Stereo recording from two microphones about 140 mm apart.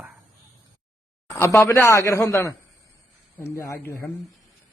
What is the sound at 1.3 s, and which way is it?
Speech, 15° left (ahead or behind).